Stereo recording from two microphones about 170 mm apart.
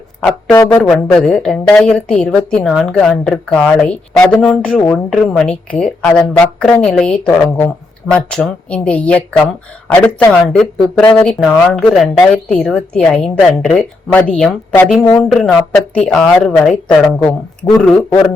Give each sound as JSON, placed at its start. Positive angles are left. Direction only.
{"t": 0.2, "sound": "speech", "side_deg": 0}
{"t": 0.5, "sound": "speech", "side_deg": 15}
{"t": 0.8, "sound": "speech", "side_deg": 5}
{"t": 10.4, "sound": "speech", "side_deg": 0}